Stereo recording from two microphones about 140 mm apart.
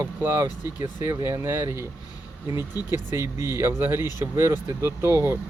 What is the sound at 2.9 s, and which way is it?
Speech, 15° right (ahead or behind).